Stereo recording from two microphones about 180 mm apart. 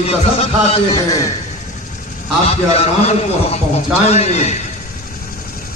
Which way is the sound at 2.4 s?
35° left (ahead or behind).